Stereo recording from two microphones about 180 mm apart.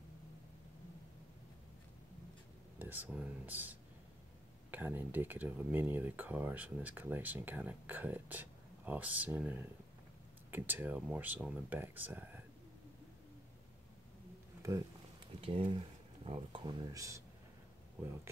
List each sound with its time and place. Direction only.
2.8 s speech: 10° right (ahead or behind)
15.4 s speech: 30° right (ahead or behind)